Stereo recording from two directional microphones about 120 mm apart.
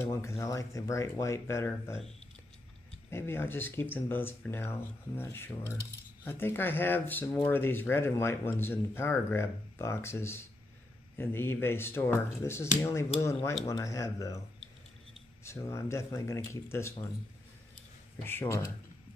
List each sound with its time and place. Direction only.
0.0 s speech: 20° left (ahead or behind)
3.1 s speech: 20° left (ahead or behind)
15.4 s speech: 25° left (ahead or behind)
18.2 s speech: 20° left (ahead or behind)